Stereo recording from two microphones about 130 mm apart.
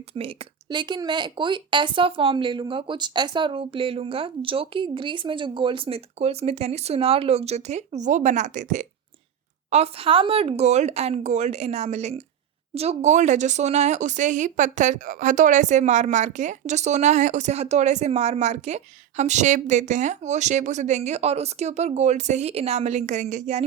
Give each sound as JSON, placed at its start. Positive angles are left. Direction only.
{"t": 0.1, "sound": "a woman's voice", "side_deg": -45}
{"t": 9.6, "sound": "speech", "side_deg": -55}